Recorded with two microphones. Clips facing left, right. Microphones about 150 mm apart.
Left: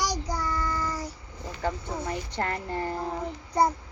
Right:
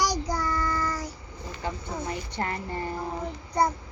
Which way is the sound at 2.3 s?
45° left (ahead or behind).